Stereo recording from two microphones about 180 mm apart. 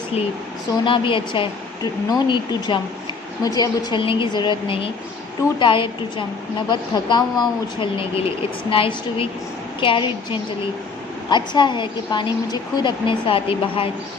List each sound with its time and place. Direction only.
0.9 s a woman's voice: 30° left (ahead or behind)